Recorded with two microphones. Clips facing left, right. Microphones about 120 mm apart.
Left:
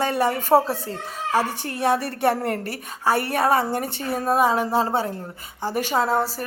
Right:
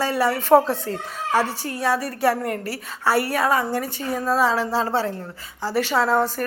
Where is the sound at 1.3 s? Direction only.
15° left (ahead or behind).